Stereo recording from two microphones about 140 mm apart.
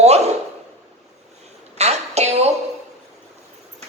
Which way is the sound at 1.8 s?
50° right (ahead or behind).